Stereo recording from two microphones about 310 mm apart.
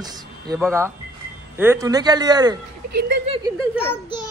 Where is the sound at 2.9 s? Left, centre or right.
Right.